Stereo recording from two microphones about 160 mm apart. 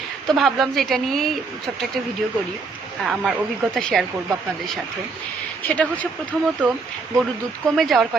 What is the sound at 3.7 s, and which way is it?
Speech, centre (ahead or behind).